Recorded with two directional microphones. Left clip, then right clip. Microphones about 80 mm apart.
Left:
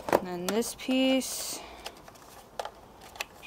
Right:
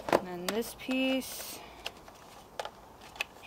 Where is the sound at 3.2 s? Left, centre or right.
Centre.